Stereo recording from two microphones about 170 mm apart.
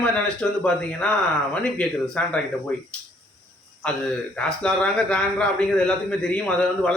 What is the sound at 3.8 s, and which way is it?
Speech, 5° left (ahead or behind).